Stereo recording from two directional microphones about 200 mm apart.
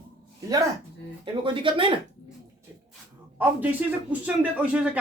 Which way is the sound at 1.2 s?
25° right (ahead or behind).